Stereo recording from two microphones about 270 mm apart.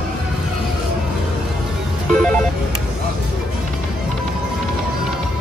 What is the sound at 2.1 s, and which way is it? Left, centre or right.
Ringtone, centre.